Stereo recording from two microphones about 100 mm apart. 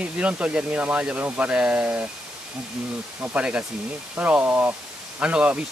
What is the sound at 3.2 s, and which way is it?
Speech, 15° right (ahead or behind).